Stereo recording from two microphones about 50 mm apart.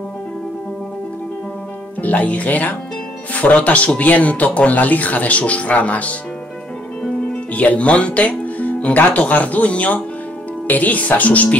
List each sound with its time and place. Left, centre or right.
2.0 s speech: left
7.5 s speech: left